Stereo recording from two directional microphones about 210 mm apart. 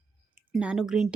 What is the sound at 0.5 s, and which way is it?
Speech, 5° right (ahead or behind).